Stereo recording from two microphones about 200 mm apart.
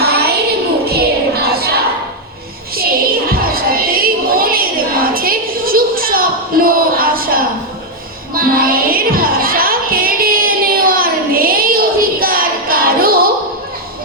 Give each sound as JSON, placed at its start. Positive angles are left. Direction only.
{"t": 0.0, "sound": "child singing", "side_deg": -50}
{"t": 0.9, "sound": "music", "side_deg": -50}
{"t": 2.7, "sound": "a sound", "side_deg": -50}
{"t": 8.4, "sound": "music", "side_deg": -45}